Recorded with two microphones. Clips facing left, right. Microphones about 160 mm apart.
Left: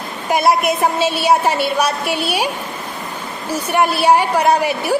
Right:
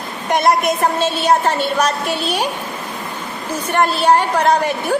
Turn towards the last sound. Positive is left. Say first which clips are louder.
# left 1 dB
turn(degrees=10)  # may be behind; listen again after turning